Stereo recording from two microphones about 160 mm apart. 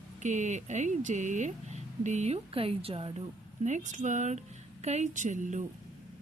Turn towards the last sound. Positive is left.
turn(degrees=-50)  # may be behind; listen again after turning